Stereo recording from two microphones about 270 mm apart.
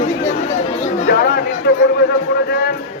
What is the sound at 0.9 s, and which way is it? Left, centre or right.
Chatter, left.